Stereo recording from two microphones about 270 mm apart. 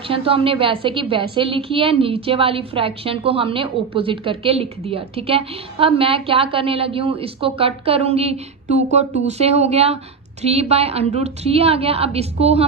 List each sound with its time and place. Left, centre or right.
0.1 s a woman's voice: centre